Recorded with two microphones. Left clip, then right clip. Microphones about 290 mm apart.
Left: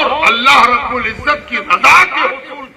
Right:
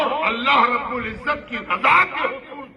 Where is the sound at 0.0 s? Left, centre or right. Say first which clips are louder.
Left 10 dB; centre.